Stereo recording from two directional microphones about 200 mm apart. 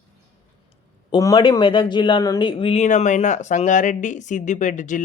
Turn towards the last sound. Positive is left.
turn(degrees=40)  # may be behind; listen again after turning